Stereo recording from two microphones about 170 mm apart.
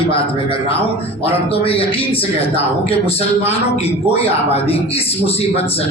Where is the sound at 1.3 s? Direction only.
35° left (ahead or behind).